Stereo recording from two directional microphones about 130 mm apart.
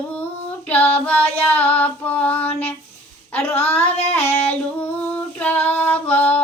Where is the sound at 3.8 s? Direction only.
55° left (ahead or behind).